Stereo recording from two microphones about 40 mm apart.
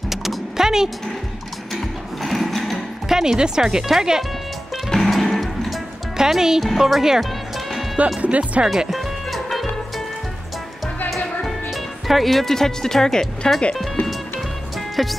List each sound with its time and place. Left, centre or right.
0.1 s power windows: centre
1.7 s music: centre
3.1 s speech: centre
4.8 s music: centre
6.1 s speech: centre
6.8 s music: centre
8.2 s speech: right
8.6 s music: centre
11.1 s music: centre
15.0 s speech: centre